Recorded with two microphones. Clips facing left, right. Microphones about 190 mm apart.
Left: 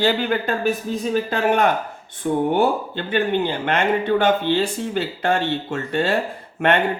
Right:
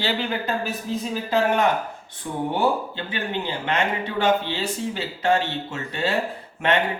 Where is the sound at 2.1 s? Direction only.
55° left (ahead or behind).